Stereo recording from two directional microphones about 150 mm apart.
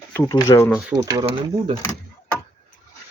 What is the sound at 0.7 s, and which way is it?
Speech, 5° right (ahead or behind).